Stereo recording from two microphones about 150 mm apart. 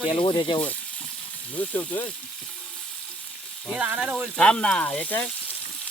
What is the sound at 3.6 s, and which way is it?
Speech, 5° right (ahead or behind).